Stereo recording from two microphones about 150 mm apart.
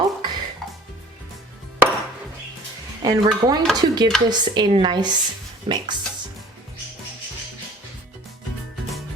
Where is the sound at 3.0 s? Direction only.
25° right (ahead or behind).